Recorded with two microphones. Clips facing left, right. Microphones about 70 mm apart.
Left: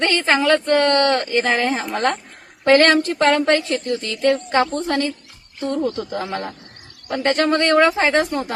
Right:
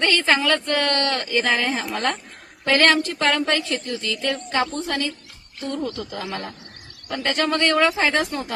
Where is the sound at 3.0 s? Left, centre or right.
Left.